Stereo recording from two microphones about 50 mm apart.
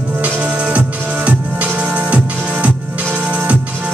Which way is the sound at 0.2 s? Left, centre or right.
Right.